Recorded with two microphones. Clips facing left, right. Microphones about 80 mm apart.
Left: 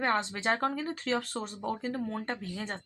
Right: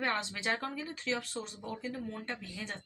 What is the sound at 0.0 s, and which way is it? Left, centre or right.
Speech, left.